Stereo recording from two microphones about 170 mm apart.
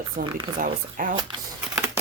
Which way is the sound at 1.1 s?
30° right (ahead or behind).